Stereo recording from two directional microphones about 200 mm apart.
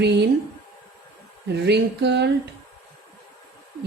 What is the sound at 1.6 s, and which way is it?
Speech, 60° right (ahead or behind).